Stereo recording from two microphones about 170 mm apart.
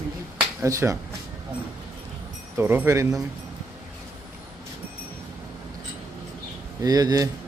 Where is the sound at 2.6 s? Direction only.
10° right (ahead or behind).